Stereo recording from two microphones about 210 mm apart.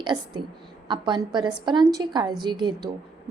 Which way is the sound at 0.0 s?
20° right (ahead or behind).